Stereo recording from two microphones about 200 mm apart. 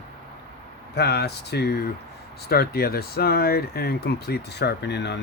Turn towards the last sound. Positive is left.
turn(degrees=60)  # may be behind; listen again after turning